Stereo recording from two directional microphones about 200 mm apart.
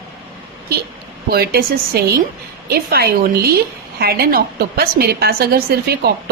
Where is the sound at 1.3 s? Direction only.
50° right (ahead or behind).